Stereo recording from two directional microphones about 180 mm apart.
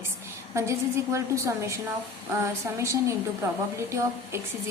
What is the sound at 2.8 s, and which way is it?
Speech, 15° right (ahead or behind).